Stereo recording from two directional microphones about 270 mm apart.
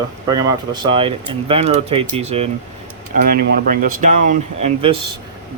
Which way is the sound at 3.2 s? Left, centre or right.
Right.